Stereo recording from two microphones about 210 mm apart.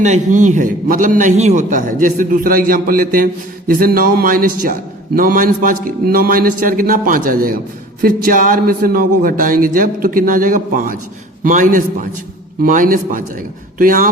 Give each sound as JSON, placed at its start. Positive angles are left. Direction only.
{"t": 0.0, "sound": "a man's voice", "side_deg": -35}